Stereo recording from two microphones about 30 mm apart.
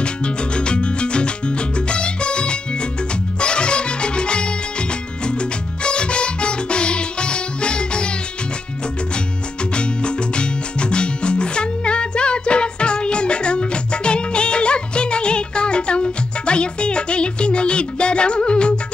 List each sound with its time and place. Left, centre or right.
0.0 s music: left
9.8 s music: left